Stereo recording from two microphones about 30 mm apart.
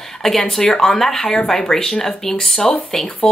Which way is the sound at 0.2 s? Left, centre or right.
Centre.